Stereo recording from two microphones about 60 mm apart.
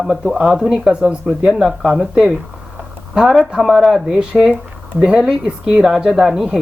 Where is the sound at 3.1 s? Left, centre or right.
Centre.